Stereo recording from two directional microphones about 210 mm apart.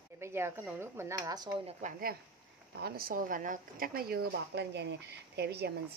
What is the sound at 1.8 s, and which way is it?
A woman's voice, 40° right (ahead or behind).